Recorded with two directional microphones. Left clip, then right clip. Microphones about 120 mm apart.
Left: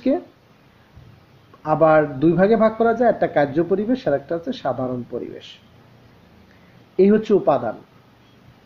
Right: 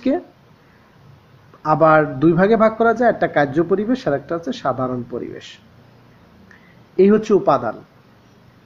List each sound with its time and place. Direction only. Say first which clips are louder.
1.6 s speech: right 2 dB; 5° left (ahead or behind)
7.0 s speech: right 2 dB; centre (ahead or behind)